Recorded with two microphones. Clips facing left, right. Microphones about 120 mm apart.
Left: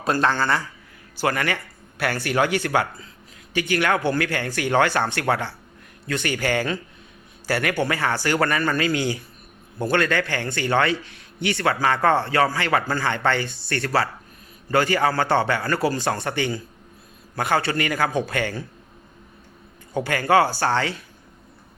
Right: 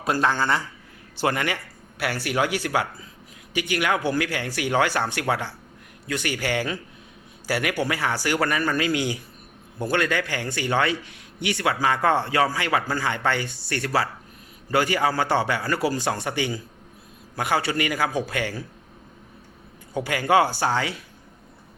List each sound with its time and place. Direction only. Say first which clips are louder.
0.0 s a man's voice: left 1 dB; 10° right (ahead or behind)
2.0 s a man's voice: left 2 dB; 10° right (ahead or behind)
19.9 s a man's voice: left 1 dB; 10° right (ahead or behind)